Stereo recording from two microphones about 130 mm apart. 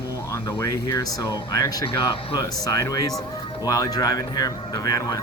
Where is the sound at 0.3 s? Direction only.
25° left (ahead or behind).